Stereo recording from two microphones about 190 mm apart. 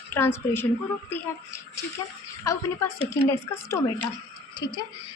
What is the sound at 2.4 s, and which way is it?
Speech, 15° left (ahead or behind).